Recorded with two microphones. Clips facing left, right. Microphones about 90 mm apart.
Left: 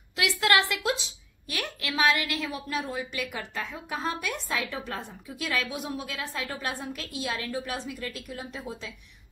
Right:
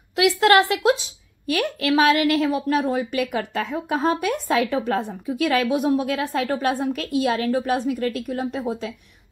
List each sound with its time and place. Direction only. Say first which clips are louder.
0.2 s a woman's voice: right 9 dB; 40° right (ahead or behind)
1.5 s a woman's voice: right 13 dB; 55° right (ahead or behind)